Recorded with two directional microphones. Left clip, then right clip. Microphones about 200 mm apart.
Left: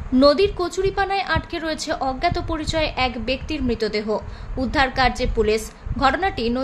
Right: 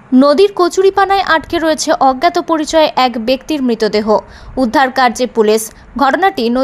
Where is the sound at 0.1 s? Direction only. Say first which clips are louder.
Right 7 dB; 40° right (ahead or behind).